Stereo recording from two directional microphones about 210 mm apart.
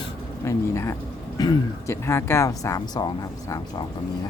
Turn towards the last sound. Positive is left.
turn(degrees=15)  # may be behind; listen again after turning